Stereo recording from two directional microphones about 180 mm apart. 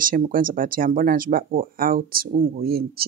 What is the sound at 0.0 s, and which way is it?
Speech, 50° right (ahead or behind).